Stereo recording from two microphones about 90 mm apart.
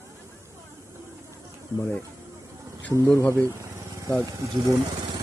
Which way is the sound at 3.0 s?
30° left (ahead or behind).